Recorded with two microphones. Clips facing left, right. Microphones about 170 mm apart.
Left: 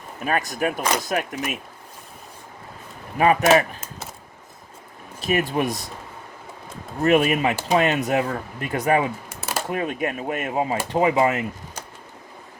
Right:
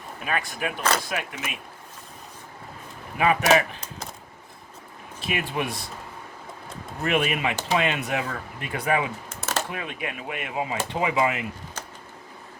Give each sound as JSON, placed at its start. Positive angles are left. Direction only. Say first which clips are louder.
{"t": 0.3, "sound": "speech", "louder": "left 5 dB", "side_deg": 40}
{"t": 0.8, "sound": "speech", "louder": "left 1 dB", "side_deg": 10}
{"t": 1.0, "sound": "speech", "louder": "left 6 dB", "side_deg": 40}
{"t": 3.2, "sound": "speech", "louder": "left 4 dB", "side_deg": 40}
{"t": 3.5, "sound": "a sound", "louder": "left 3 dB", "side_deg": 5}
{"t": 5.2, "sound": "speech", "louder": "left 6 dB", "side_deg": 40}
{"t": 7.0, "sound": "speech", "louder": "left 6 dB", "side_deg": 40}
{"t": 9.3, "sound": "a sound", "louder": "even", "side_deg": 10}
{"t": 9.6, "sound": "speech", "louder": "left 8 dB", "side_deg": 45}